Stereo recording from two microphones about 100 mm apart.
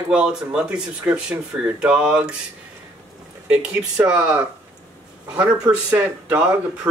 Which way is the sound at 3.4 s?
10° right (ahead or behind).